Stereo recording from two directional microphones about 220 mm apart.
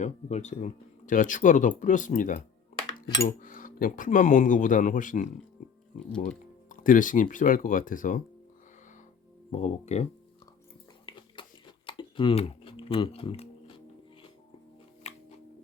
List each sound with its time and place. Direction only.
0.0 s speech: 30° left (ahead or behind)
9.5 s speech: 30° left (ahead or behind)
11.1 s a sound: 20° left (ahead or behind)